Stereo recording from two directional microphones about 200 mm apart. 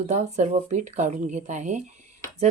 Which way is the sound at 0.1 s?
35° right (ahead or behind).